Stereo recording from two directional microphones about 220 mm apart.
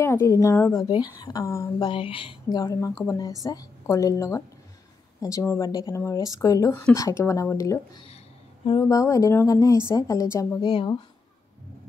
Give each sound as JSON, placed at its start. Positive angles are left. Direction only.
{"t": 0.0, "sound": "a woman's voice", "side_deg": 10}